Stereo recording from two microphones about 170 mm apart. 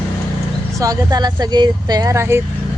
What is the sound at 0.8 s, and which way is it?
Speech, 20° right (ahead or behind).